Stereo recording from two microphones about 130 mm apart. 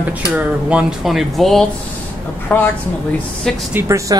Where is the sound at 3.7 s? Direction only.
25° right (ahead or behind).